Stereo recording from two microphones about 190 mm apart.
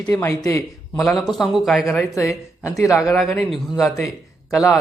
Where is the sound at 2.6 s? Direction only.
15° left (ahead or behind).